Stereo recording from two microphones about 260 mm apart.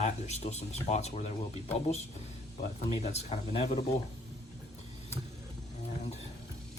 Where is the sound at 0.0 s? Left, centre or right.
Left.